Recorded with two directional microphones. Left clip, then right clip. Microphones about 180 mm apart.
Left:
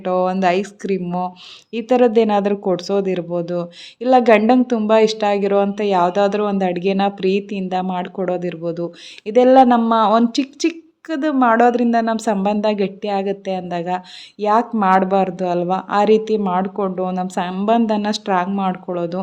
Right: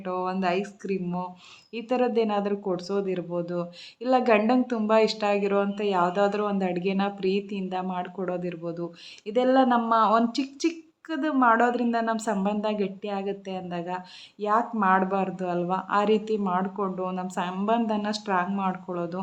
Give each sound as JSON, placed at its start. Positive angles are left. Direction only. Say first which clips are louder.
{"t": 0.0, "sound": "speech", "louder": "left 11 dB", "side_deg": 40}